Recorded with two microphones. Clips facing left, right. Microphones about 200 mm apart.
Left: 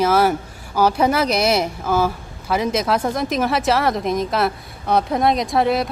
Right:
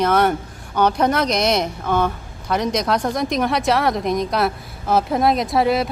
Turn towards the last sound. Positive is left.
turn(degrees=0)  # may be behind; listen again after turning